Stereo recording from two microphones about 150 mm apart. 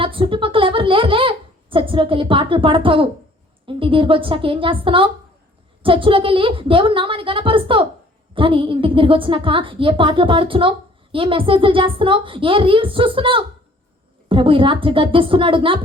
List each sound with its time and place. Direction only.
0.0 s a woman's voice: 35° right (ahead or behind)